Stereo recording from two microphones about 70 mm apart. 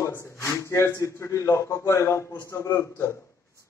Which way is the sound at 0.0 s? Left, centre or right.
Left.